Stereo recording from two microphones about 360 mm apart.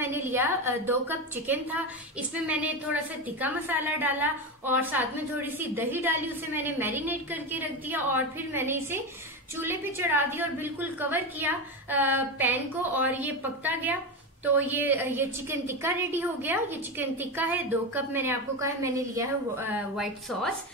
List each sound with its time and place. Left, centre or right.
0.0 s a woman's voice: centre